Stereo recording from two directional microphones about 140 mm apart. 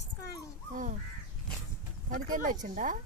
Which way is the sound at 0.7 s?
70° right (ahead or behind).